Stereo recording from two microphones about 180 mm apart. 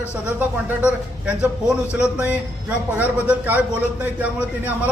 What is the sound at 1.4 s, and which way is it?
A man's voice, 5° right (ahead or behind).